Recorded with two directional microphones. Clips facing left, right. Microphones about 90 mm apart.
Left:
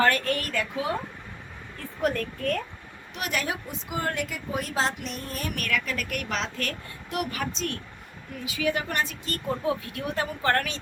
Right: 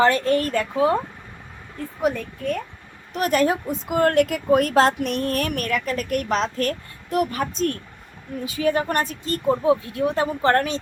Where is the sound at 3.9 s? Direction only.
55° right (ahead or behind); by 5.5 s 75° right (ahead or behind).